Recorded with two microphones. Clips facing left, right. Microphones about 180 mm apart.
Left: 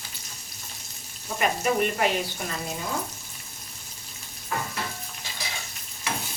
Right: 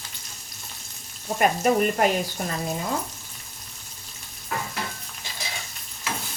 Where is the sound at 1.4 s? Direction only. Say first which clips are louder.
Right 4 dB; 45° right (ahead or behind).